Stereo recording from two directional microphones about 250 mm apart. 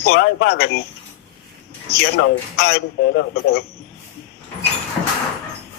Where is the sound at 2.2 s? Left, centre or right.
Left.